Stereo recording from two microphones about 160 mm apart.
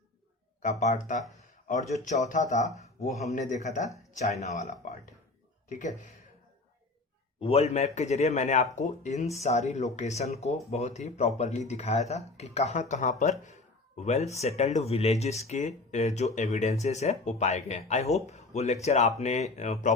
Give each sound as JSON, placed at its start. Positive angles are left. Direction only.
{"t": 0.6, "sound": "speech", "side_deg": 50}
{"t": 7.3, "sound": "speech", "side_deg": 35}